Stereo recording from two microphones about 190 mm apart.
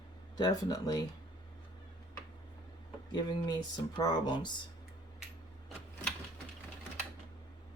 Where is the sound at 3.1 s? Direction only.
20° left (ahead or behind).